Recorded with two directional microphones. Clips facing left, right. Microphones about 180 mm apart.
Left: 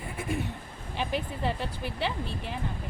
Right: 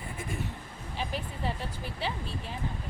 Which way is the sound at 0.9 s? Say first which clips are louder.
Left 4 dB; 65° left (ahead or behind).